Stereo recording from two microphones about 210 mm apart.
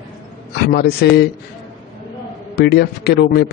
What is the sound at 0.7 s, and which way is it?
Speech, 50° left (ahead or behind).